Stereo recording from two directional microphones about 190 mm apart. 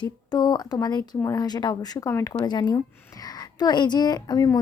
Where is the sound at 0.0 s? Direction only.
20° left (ahead or behind).